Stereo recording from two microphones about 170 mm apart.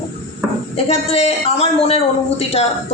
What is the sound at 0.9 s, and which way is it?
Speech, 35° left (ahead or behind).